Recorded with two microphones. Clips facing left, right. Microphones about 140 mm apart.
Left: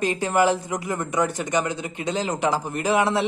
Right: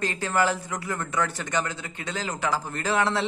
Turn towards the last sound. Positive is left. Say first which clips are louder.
# left 4 dB
turn(degrees=15)  # may be behind; listen again after turning